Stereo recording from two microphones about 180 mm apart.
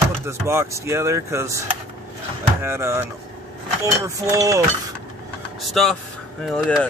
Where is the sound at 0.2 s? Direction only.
15° right (ahead or behind).